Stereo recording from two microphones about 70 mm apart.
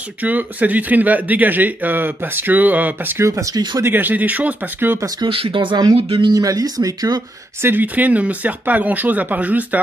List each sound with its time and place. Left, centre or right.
0.2 s speech: right
3.2 s speech: right
3.8 s speech: right
5.8 s speech: right
7.6 s speech: right